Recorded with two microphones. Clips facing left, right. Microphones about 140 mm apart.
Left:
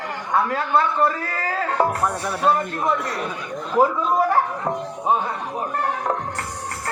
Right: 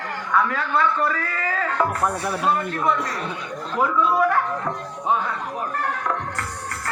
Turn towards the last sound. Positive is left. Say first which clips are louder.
# left 2 dB
turn(degrees=30)  # may be behind; listen again after turning